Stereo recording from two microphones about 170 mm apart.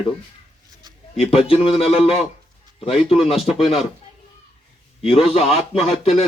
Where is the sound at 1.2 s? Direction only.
35° left (ahead or behind).